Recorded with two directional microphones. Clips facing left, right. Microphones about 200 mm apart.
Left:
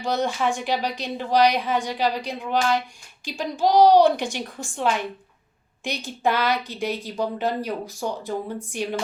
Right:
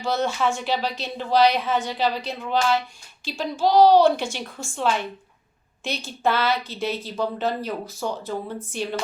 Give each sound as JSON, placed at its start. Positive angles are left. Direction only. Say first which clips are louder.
{"t": 0.0, "sound": "a woman's voice", "louder": "even", "side_deg": 15}